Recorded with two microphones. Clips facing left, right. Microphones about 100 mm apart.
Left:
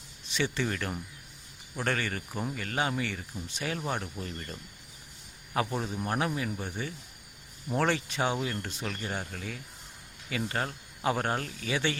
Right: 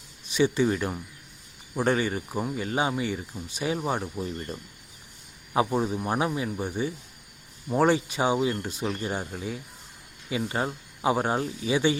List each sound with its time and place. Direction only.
0.3 s speech: 15° right (ahead or behind)